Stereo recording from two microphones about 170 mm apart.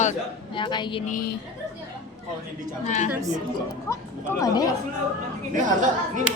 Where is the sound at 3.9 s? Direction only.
20° left (ahead or behind).